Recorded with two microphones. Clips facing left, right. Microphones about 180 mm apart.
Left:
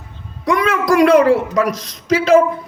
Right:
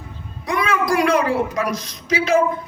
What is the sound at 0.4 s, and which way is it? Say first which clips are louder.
A man's voice: left 5 dB; 85° left.